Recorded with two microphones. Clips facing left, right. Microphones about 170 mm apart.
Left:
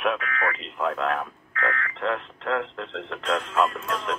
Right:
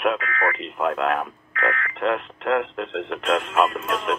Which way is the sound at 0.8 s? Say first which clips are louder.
Right 3 dB; 65° right (ahead or behind).